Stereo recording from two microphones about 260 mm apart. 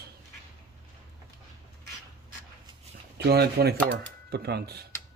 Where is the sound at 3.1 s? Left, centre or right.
Right.